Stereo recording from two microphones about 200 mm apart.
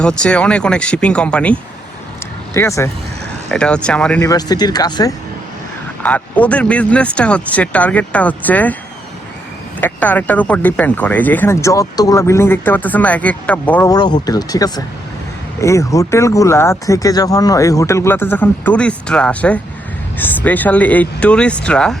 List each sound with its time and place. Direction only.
0.0 s speech: 5° left (ahead or behind)
4.3 s speech: 20° left (ahead or behind)
6.0 s speech: 5° left (ahead or behind)
9.8 s speech: 10° left (ahead or behind)
13.9 s speech: 20° left (ahead or behind); by 21.9 s 5° left (ahead or behind)